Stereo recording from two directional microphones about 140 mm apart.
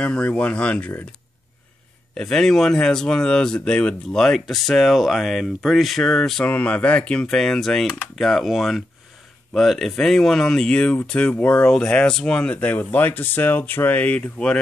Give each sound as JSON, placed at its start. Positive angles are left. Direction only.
{"t": 0.0, "sound": "speech", "side_deg": 10}
{"t": 2.1, "sound": "speech", "side_deg": 5}